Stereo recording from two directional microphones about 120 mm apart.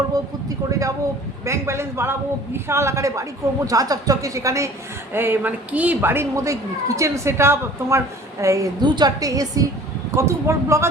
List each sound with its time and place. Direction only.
0.4 s a woman's voice: 30° right (ahead or behind)